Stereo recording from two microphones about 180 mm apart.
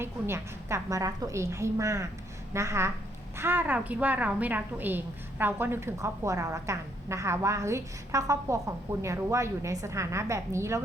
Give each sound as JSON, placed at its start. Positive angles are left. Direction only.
{"t": 0.0, "sound": "a woman's voice", "side_deg": -15}